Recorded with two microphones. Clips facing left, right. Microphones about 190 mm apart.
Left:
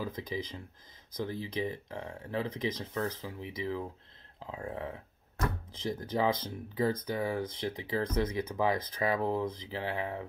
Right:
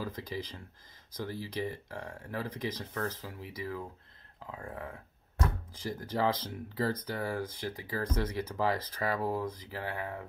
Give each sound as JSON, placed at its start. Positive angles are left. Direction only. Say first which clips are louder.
{"t": 0.0, "sound": "speech", "louder": "left 2 dB", "side_deg": 20}